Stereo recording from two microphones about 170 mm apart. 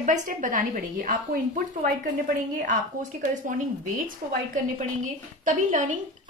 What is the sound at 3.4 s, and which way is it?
A woman's voice, 50° right (ahead or behind).